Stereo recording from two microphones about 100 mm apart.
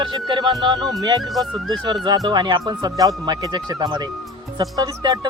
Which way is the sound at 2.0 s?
45° right (ahead or behind).